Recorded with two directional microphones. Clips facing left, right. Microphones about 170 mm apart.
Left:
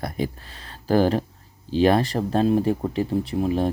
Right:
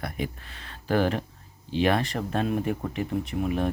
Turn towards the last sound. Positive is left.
turn(degrees=30)  # may be behind; listen again after turning